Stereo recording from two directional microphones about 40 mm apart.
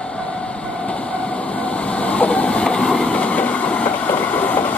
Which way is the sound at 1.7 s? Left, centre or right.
Left.